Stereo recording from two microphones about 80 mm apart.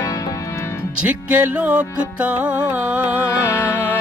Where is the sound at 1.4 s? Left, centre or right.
Centre.